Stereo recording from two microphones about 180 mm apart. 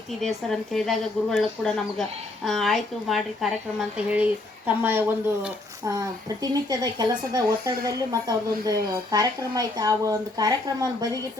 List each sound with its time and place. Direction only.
0.2 s speech: centre (ahead or behind); by 11.2 s 20° right (ahead or behind)